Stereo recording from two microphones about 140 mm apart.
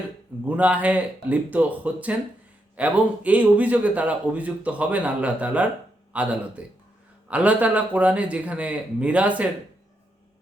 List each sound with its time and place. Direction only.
0.4 s speech: 10° right (ahead or behind)